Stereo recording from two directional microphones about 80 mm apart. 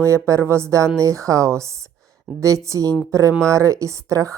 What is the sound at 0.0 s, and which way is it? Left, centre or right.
Speech, right.